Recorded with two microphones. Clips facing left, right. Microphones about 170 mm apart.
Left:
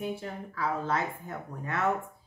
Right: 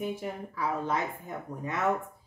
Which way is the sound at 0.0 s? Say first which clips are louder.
Right 1 dB; 15° right (ahead or behind).